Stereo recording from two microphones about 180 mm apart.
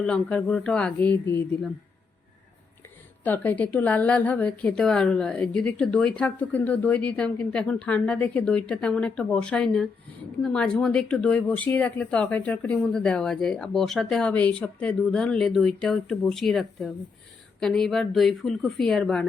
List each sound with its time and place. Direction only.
0.0 s a woman's voice: 5° left (ahead or behind)
3.2 s a woman's voice: 10° left (ahead or behind)